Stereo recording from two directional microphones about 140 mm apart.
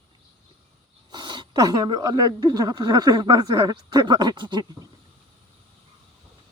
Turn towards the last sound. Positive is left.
turn(degrees=-30)  # may be behind; listen again after turning